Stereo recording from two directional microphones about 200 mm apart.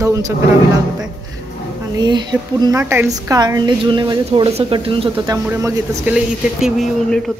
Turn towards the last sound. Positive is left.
turn(degrees=0)  # may be behind; listen again after turning